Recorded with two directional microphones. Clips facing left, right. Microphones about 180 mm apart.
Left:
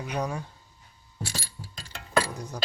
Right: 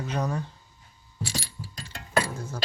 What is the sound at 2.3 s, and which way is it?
Keys jangling, 15° left (ahead or behind).